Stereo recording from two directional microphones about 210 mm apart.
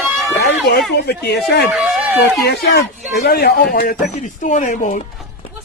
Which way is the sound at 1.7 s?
Centre (ahead or behind).